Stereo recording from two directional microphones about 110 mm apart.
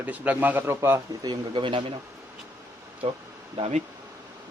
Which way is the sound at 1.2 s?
40° right (ahead or behind).